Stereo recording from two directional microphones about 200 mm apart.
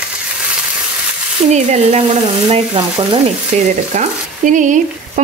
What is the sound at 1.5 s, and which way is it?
Frying, 35° right (ahead or behind).